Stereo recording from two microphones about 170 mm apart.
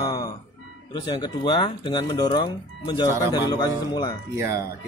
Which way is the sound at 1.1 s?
25° left (ahead or behind).